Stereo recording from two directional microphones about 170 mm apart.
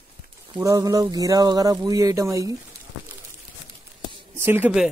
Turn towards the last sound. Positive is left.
turn(degrees=-5)  # may be behind; listen again after turning